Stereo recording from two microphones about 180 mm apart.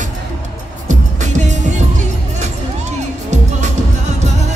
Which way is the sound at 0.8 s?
40° right (ahead or behind).